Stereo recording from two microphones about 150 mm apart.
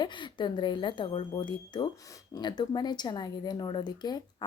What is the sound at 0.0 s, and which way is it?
A woman's voice, 30° left (ahead or behind).